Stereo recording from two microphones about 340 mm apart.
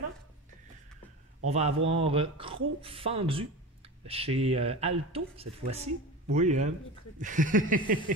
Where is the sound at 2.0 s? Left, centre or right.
Centre.